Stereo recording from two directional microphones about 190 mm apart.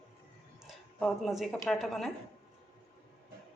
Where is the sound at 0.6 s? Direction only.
Centre (ahead or behind).